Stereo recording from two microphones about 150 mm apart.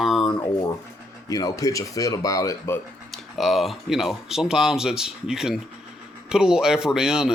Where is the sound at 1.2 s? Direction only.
25° left (ahead or behind).